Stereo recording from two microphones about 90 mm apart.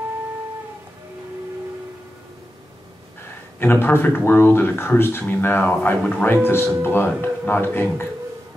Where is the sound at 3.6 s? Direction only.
25° left (ahead or behind).